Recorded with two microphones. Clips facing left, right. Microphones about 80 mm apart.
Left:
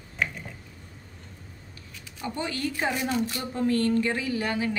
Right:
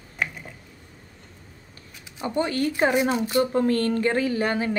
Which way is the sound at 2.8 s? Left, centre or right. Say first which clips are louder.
Right 8 dB; right.